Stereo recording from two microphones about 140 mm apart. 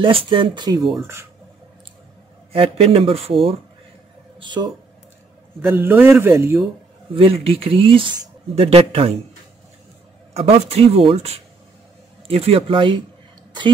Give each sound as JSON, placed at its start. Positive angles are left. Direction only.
{"t": 0.0, "sound": "speech", "side_deg": -40}
{"t": 0.7, "sound": "speech", "side_deg": 0}
{"t": 2.5, "sound": "speech", "side_deg": -45}
{"t": 4.4, "sound": "speech", "side_deg": -35}
{"t": 5.6, "sound": "a man's voice", "side_deg": -15}
{"t": 7.2, "sound": "speech", "side_deg": -40}
{"t": 10.3, "sound": "speech", "side_deg": -45}